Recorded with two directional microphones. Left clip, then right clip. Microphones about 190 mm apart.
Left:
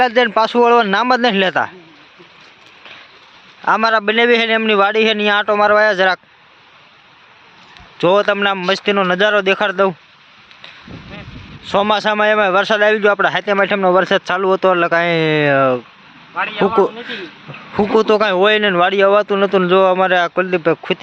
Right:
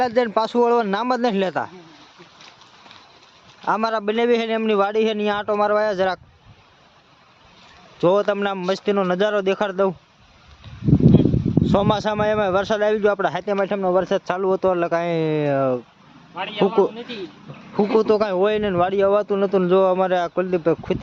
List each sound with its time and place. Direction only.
0.0 s speech: centre (ahead or behind)
3.7 s speech: 5° left (ahead or behind)
7.9 s speech: centre (ahead or behind)
11.7 s speech: centre (ahead or behind)
13.6 s speech: 15° left (ahead or behind)
14.3 s speech: centre (ahead or behind)
16.3 s a man's voice: 30° left (ahead or behind)
18.0 s speech: 5° left (ahead or behind)